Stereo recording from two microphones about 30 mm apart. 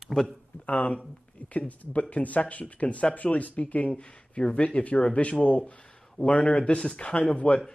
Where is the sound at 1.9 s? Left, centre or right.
Left.